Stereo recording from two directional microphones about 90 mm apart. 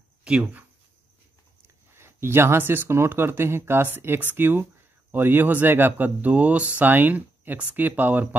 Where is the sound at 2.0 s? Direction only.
25° right (ahead or behind).